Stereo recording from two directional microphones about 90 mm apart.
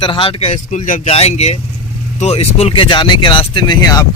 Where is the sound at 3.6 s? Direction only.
45° left (ahead or behind).